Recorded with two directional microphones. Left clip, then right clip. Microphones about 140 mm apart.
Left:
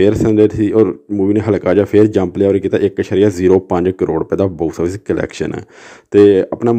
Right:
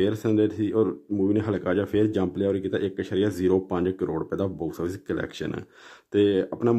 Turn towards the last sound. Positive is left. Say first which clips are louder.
# left 12 dB
turn(degrees=25)  # may be behind; listen again after turning